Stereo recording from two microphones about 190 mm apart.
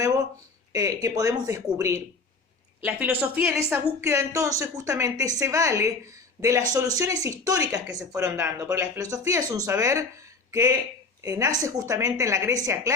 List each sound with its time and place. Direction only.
0.7 s a woman's voice: 20° right (ahead or behind)